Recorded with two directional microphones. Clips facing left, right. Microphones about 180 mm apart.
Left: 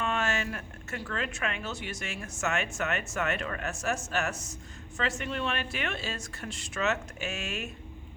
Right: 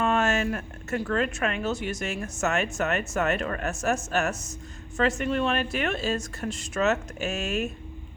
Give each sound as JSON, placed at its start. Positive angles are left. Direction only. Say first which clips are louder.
{"t": 0.0, "sound": "speech", "louder": "right 7 dB", "side_deg": -45}